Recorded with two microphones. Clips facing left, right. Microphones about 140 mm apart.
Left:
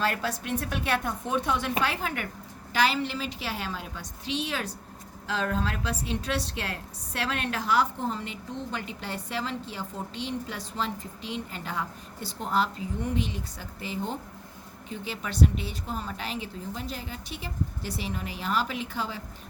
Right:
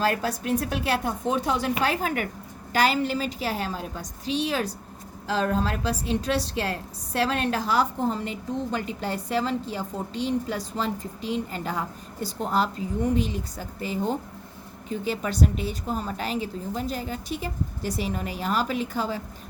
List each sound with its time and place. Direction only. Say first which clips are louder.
0.0 s a woman's voice: right 4 dB; 40° right (ahead or behind)